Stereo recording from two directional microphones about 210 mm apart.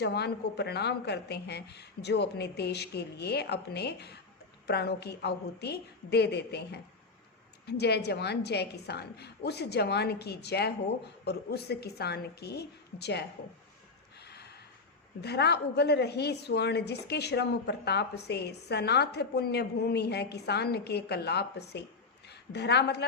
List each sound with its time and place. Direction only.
0.0 s a woman's voice: 55° left (ahead or behind)
15.2 s a woman's voice: 50° left (ahead or behind)